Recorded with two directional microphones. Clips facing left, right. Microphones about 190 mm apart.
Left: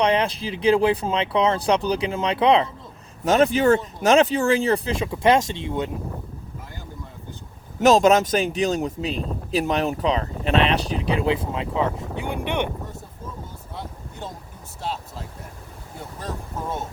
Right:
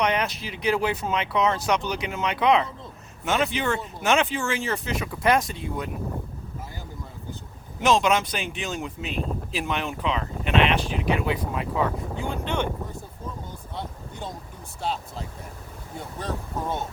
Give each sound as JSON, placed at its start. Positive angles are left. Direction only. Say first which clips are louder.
{"t": 0.0, "sound": "speech", "louder": "left 4 dB", "side_deg": 30}
{"t": 3.2, "sound": "speech", "louder": "left 8 dB", "side_deg": 40}
{"t": 7.8, "sound": "speech", "louder": "left 6 dB", "side_deg": 40}